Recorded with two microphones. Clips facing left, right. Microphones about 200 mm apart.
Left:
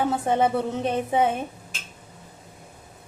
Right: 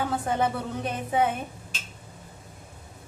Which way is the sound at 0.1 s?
25° left (ahead or behind).